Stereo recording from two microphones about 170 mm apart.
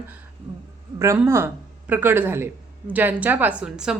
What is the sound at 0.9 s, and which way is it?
A man's voice, 20° right (ahead or behind).